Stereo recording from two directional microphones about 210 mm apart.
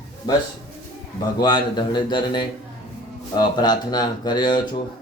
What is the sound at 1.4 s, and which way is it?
Speech, 20° left (ahead or behind).